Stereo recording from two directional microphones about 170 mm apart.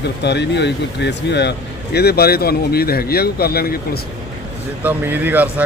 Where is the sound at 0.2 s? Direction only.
85° left; by 3.8 s 65° left (ahead or behind).